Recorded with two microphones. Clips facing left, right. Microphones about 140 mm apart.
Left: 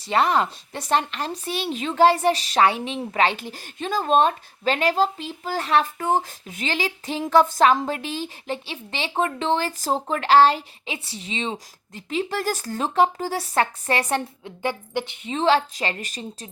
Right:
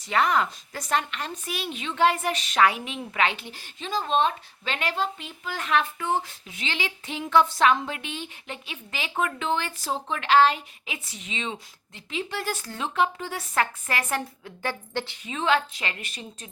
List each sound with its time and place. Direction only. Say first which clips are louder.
0.0 s speech: left 3 dB; 30° left (ahead or behind)
14.6 s speech: left 4 dB; 15° left (ahead or behind); by 16.5 s 40° left (ahead or behind)